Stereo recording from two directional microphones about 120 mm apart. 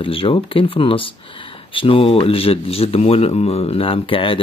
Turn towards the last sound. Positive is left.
turn(degrees=45)  # may be behind; listen again after turning